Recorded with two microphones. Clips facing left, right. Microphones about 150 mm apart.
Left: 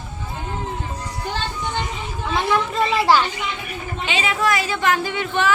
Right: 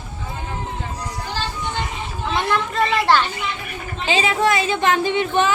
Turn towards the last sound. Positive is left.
turn(degrees=-20)  # may be behind; listen again after turning